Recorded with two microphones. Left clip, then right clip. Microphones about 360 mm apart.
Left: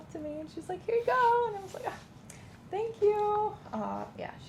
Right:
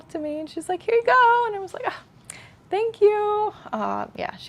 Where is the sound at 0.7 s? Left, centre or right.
Right.